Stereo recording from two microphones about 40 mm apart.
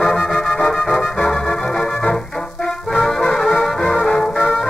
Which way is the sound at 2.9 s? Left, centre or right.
Centre.